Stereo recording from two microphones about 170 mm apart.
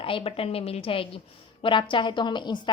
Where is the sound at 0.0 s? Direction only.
30° left (ahead or behind).